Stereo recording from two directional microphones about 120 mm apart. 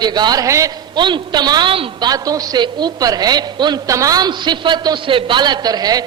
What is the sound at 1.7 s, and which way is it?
A woman's voice, 50° right (ahead or behind).